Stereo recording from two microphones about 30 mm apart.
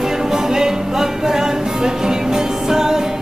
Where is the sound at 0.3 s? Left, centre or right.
Centre.